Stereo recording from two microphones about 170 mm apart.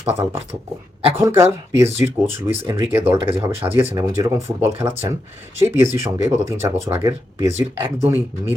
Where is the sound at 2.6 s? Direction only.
15° right (ahead or behind).